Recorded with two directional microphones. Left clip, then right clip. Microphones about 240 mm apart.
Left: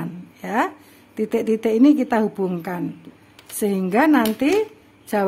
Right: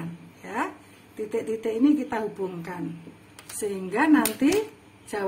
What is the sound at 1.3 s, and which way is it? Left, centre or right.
Speech, left.